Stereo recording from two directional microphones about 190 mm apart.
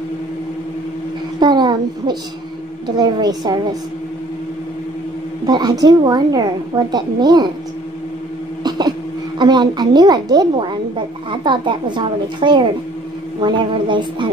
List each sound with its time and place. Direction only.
1.4 s a sound: 25° right (ahead or behind)
3.0 s a woman's voice: 20° right (ahead or behind)
5.5 s a woman's voice: 20° right (ahead or behind)
8.6 s throat clearing: 20° right (ahead or behind)
9.4 s a woman's voice: 25° right (ahead or behind)